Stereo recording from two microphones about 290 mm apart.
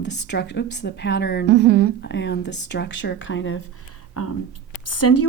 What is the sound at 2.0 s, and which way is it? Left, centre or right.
Speech, left.